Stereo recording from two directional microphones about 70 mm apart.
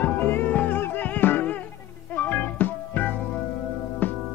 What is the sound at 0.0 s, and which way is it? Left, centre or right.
Music, left.